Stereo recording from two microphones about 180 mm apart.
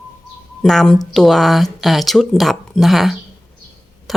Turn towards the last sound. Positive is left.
turn(degrees=0)  # may be behind; listen again after turning